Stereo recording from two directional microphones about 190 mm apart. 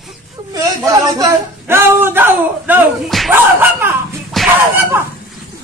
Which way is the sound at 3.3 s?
10° right (ahead or behind).